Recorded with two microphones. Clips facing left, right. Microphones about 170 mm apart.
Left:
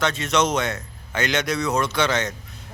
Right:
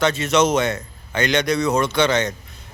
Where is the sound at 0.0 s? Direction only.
Centre (ahead or behind).